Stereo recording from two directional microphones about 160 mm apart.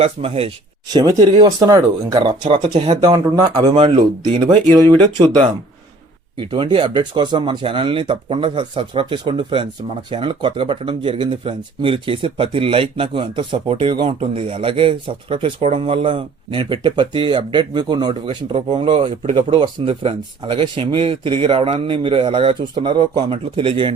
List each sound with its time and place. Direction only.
0.0 s speech: 40° right (ahead or behind)
0.9 s speech: 25° right (ahead or behind)